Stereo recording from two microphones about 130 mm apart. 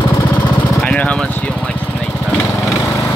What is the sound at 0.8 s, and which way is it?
Vehicle, 10° left (ahead or behind).